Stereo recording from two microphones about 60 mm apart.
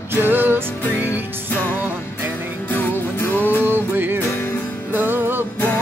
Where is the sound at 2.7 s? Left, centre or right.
Left.